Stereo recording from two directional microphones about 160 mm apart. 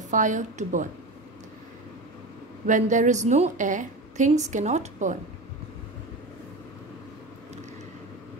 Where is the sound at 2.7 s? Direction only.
50° right (ahead or behind).